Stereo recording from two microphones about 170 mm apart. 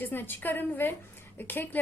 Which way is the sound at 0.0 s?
10° left (ahead or behind).